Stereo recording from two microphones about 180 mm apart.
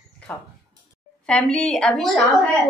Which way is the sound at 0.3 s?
5° left (ahead or behind).